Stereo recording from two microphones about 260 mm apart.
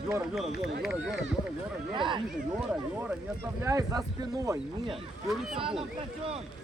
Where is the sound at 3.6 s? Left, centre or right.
Centre.